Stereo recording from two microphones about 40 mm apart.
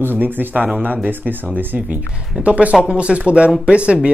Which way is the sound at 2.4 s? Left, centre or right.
Right.